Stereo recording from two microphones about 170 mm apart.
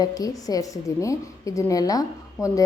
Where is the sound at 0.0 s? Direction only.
20° left (ahead or behind).